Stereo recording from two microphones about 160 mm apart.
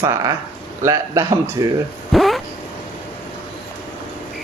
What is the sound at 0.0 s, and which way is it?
A man's voice, 20° right (ahead or behind).